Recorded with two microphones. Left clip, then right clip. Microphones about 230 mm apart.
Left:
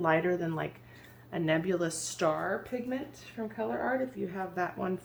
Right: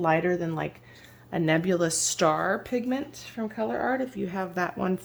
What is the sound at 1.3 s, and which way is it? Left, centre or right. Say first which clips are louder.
Speech: right 5 dB; right.